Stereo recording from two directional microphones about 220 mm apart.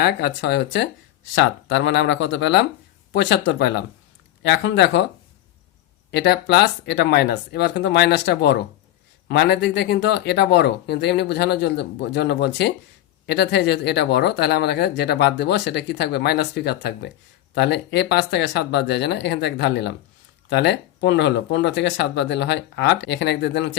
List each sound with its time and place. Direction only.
0.0 s speech: 50° left (ahead or behind)
6.1 s speech: 50° left (ahead or behind)